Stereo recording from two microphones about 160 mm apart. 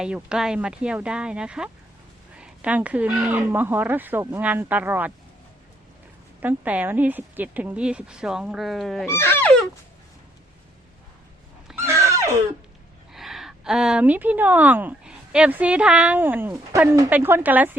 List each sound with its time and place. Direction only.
0.0 s speech: 5° right (ahead or behind)
6.4 s speech: 10° right (ahead or behind)
9.0 s speech: 15° left (ahead or behind)
11.7 s a sound: 15° right (ahead or behind)
13.1 s speech: centre (ahead or behind)